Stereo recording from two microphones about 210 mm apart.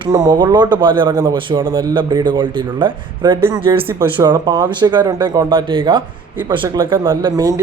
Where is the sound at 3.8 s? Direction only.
10° right (ahead or behind).